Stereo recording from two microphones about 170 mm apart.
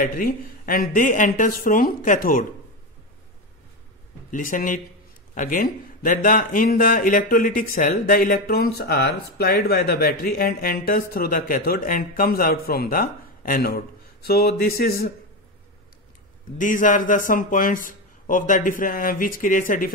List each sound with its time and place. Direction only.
0.0 s speech: 55° left (ahead or behind)
4.3 s a man's voice: 55° left (ahead or behind)
16.5 s speech: 50° left (ahead or behind)